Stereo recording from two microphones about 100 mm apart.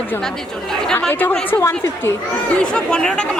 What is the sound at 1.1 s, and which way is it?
Speech, 20° left (ahead or behind).